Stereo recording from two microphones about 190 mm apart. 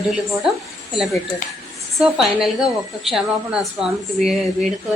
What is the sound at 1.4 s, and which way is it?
Speech, 45° left (ahead or behind).